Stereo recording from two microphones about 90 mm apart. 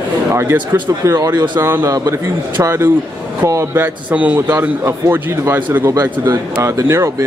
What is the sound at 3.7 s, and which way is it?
Speech, 20° right (ahead or behind).